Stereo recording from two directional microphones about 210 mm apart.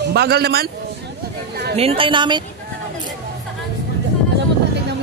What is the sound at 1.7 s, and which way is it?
Speech, 25° right (ahead or behind).